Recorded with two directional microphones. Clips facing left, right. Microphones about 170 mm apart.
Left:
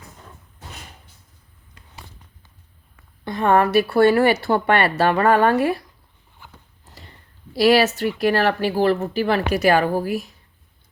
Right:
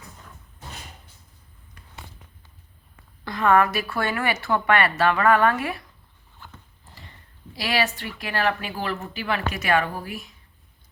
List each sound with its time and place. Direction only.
3.2 s speech: 25° left (ahead or behind)
7.5 s speech: 40° left (ahead or behind)